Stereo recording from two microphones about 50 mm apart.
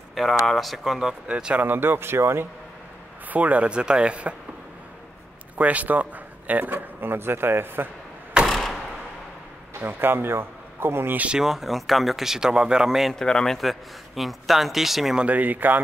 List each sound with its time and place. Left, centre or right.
0.1 s speech: centre
1.2 s speech: centre
1.6 s speech: right
3.3 s speech: right
5.6 s speech: right
8.5 s a sound: centre
9.8 s a man's voice: right
11.3 s speech: centre
13.1 s a man's voice: centre
13.6 s speech: centre
15.2 s speech: right